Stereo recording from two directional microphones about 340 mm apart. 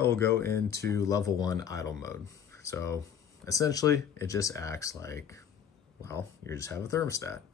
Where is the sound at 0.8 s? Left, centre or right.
Centre.